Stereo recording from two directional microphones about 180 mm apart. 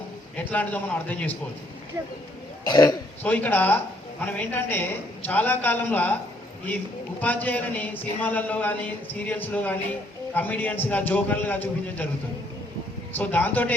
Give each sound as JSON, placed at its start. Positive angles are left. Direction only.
{"t": 0.3, "sound": "speech", "side_deg": 10}
{"t": 2.6, "sound": "speech", "side_deg": 25}
{"t": 3.2, "sound": "speech", "side_deg": 10}
{"t": 13.1, "sound": "speech", "side_deg": 10}